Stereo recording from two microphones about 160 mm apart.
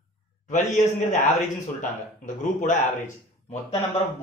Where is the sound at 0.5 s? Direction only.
50° left (ahead or behind).